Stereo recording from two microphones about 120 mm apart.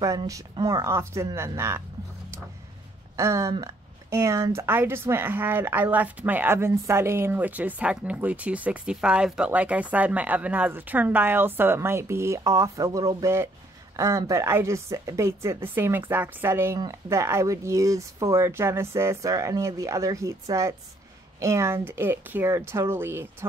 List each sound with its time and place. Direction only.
0.7 s a woman's voice: 25° right (ahead or behind)
3.2 s a woman's voice: 25° right (ahead or behind)